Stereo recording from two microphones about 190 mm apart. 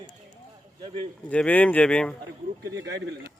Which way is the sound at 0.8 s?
25° right (ahead or behind).